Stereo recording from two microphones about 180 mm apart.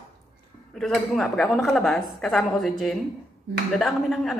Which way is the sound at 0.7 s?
Centre (ahead or behind).